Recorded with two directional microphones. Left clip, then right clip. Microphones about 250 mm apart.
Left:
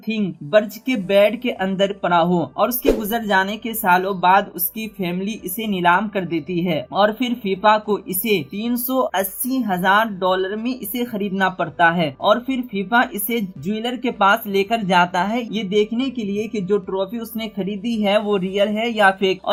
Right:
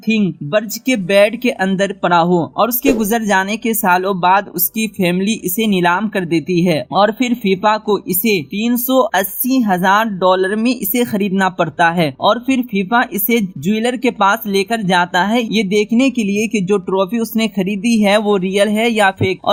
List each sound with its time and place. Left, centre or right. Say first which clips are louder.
0.0 s a woman's voice: right 8 dB; right